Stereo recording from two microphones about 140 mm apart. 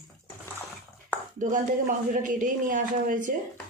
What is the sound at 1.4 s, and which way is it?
Speech, 70° right (ahead or behind).